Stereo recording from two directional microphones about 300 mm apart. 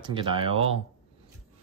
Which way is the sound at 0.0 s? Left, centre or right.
Centre.